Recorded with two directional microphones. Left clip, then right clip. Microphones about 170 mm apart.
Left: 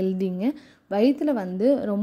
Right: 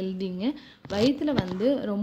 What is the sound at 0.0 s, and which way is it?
A woman's voice, 45° left (ahead or behind).